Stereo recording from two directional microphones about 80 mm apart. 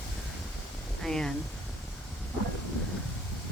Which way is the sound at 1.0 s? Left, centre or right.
Centre.